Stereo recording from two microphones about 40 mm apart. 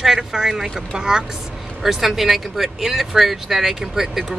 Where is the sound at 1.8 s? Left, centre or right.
Centre.